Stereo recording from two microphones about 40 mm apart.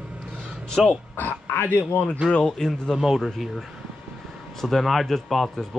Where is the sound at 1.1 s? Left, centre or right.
Left.